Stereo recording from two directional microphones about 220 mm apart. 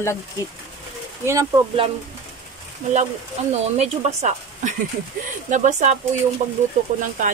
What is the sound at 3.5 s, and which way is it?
Speech, 30° right (ahead or behind).